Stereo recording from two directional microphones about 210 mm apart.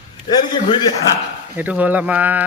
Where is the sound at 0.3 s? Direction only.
20° left (ahead or behind).